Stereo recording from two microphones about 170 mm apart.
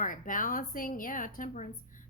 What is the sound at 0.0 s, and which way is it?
A woman's voice, 50° left (ahead or behind).